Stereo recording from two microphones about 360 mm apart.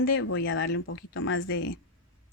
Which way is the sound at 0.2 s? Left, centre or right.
Left.